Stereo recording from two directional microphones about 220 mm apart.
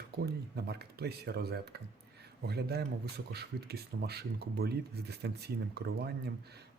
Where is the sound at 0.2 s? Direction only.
45° right (ahead or behind).